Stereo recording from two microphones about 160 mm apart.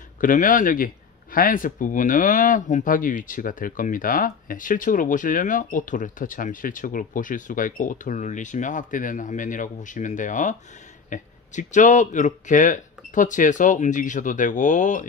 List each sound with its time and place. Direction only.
0.2 s speech: 55° left (ahead or behind)